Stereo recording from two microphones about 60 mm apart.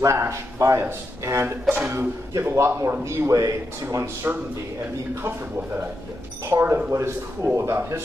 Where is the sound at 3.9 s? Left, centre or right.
Right.